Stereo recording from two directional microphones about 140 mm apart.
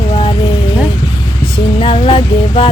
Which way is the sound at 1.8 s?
40° left (ahead or behind).